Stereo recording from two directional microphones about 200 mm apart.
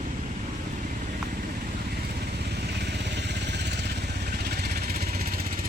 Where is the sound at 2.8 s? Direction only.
55° right (ahead or behind).